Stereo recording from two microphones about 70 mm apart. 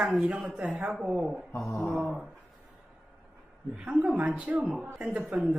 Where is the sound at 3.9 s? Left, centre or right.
Centre.